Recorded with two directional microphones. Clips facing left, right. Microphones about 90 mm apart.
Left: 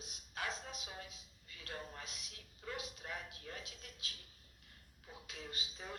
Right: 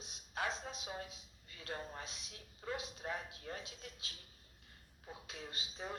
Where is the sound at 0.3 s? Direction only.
25° right (ahead or behind).